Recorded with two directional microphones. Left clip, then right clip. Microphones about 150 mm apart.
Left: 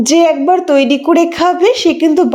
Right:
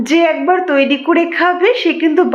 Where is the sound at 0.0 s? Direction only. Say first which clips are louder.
Left 3 dB; 35° left (ahead or behind).